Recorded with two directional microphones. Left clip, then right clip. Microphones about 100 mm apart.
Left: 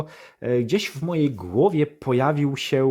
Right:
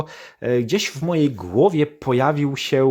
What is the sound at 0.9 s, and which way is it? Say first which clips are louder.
Speech: right 4 dB; 20° right (ahead or behind).